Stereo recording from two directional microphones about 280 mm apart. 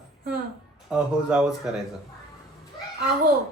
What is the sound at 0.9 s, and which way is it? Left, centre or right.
Speech, centre.